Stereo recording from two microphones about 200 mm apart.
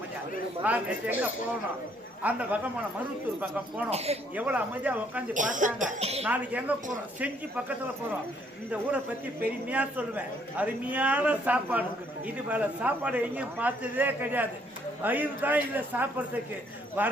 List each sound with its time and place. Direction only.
0.6 s speech: 5° right (ahead or behind)
3.8 s speech: 30° right (ahead or behind)
4.4 s speech: 10° right (ahead or behind)
5.3 s speech: 40° right (ahead or behind)
6.2 s speech: 5° right (ahead or behind)
9.6 s speech: 5° right (ahead or behind)